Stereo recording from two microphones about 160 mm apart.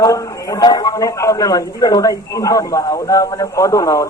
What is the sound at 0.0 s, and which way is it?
Speech, 20° left (ahead or behind).